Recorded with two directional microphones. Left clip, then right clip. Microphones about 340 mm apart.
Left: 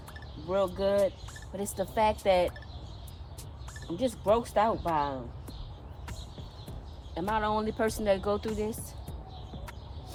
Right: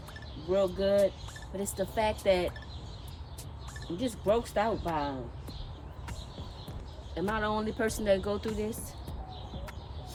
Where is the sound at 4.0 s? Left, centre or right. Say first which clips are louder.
Left 2 dB; centre.